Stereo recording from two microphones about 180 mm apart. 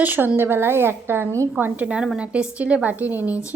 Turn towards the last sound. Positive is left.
turn(degrees=-10)  # may be behind; listen again after turning